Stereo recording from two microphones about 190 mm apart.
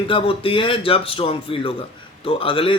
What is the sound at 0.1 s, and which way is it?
A man's voice, 30° left (ahead or behind).